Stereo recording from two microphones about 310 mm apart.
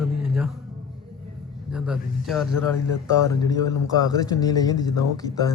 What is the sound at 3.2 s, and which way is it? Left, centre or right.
Speech, centre.